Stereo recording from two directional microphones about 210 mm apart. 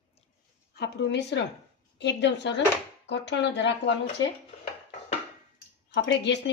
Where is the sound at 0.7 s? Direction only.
50° left (ahead or behind).